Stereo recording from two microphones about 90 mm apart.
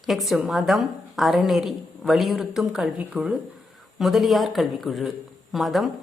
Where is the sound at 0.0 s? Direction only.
Centre (ahead or behind).